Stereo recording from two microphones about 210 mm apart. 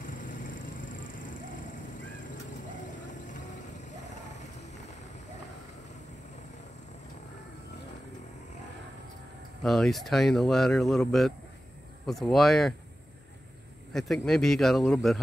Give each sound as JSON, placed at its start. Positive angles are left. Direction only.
{"t": 0.0, "sound": "vehicle", "side_deg": 40}
{"t": 9.6, "sound": "speech", "side_deg": 0}
{"t": 13.9, "sound": "speech", "side_deg": 0}